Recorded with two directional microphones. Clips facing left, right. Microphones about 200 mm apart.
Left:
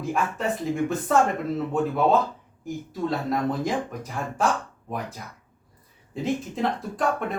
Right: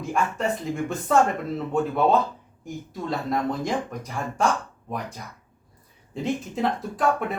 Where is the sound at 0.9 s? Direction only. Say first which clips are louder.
Right 2 dB; centre (ahead or behind).